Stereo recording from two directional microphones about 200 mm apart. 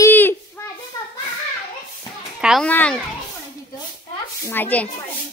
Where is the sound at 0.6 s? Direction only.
10° left (ahead or behind).